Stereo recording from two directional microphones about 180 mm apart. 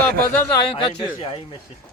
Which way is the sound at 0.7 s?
30° left (ahead or behind).